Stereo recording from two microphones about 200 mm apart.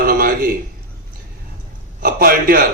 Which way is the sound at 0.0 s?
45° right (ahead or behind).